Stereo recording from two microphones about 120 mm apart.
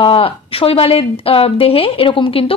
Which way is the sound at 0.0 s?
50° left (ahead or behind).